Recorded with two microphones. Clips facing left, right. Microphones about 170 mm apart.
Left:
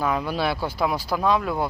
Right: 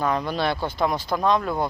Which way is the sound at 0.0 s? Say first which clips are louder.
Even; 5° left (ahead or behind).